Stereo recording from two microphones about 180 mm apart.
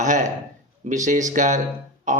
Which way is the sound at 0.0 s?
45° right (ahead or behind).